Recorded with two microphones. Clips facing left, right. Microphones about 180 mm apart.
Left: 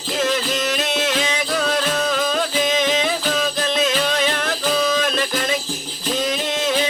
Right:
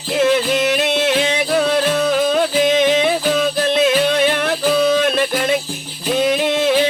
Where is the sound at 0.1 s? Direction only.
60° right (ahead or behind).